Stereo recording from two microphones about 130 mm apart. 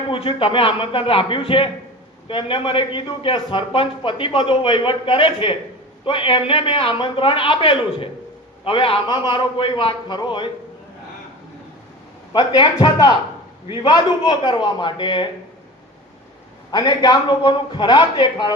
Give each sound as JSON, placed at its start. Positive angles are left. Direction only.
{"t": 0.1, "sound": "a man's voice", "side_deg": 45}
{"t": 12.3, "sound": "a man's voice", "side_deg": 35}
{"t": 16.7, "sound": "a man's voice", "side_deg": 30}